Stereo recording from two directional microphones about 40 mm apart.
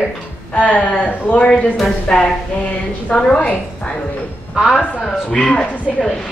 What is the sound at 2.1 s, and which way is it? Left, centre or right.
Speech, centre.